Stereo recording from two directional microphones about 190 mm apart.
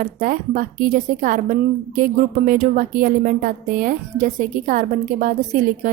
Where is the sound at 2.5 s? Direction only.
45° right (ahead or behind).